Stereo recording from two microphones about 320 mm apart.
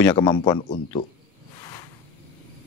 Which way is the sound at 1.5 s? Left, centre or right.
Centre.